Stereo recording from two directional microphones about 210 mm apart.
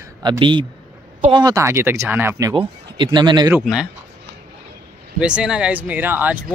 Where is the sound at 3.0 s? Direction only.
20° right (ahead or behind).